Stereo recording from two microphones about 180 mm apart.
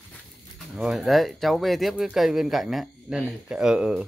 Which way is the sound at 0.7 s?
5° right (ahead or behind).